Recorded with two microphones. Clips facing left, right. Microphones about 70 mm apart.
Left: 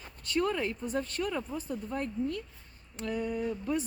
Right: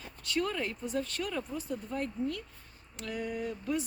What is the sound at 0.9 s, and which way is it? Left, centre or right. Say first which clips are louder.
A woman's voice: left 2 dB; left.